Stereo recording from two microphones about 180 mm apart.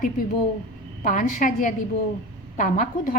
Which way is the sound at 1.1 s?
50° left (ahead or behind).